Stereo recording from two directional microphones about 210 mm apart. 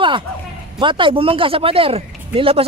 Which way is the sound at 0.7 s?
25° right (ahead or behind).